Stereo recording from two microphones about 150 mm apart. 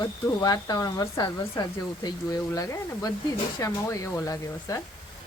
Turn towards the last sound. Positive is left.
turn(degrees=20)  # may be behind; listen again after turning